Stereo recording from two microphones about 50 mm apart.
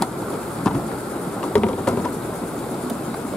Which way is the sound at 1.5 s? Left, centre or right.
Left.